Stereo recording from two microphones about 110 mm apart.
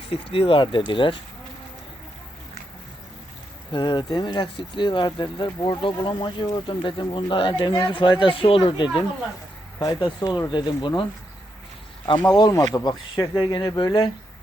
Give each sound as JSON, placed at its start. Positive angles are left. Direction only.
{"t": 0.1, "sound": "speech", "side_deg": 55}
{"t": 3.7, "sound": "speech", "side_deg": 45}
{"t": 12.4, "sound": "speech", "side_deg": 35}